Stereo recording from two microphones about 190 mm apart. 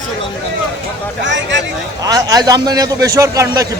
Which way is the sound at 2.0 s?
20° right (ahead or behind).